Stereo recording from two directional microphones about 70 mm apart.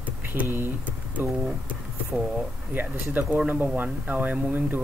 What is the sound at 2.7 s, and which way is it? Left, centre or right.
Speech, right.